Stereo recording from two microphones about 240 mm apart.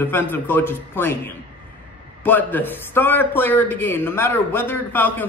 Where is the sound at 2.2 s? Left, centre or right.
Centre.